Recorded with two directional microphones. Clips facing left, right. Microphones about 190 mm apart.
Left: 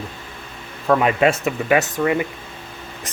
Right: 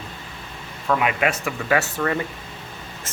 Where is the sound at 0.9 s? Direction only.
35° left (ahead or behind).